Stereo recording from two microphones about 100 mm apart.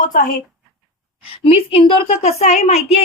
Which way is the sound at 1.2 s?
70° left (ahead or behind).